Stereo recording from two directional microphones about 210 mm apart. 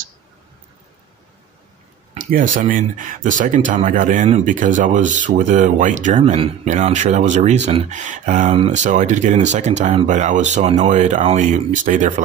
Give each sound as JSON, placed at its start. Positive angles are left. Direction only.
{"t": 2.1, "sound": "speech", "side_deg": -40}